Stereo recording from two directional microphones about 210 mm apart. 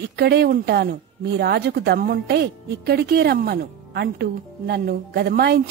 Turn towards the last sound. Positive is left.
turn(degrees=-50)  # may be behind; listen again after turning